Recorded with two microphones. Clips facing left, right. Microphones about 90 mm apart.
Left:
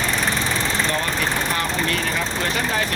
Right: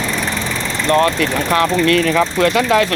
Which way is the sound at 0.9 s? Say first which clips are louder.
Right 9 dB; 65° right (ahead or behind).